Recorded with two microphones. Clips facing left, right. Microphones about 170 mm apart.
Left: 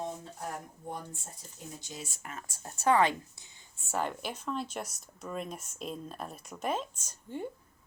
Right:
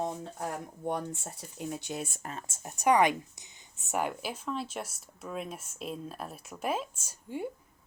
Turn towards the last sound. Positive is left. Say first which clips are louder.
# right 2 dB
turn(degrees=-10)  # may be behind; listen again after turning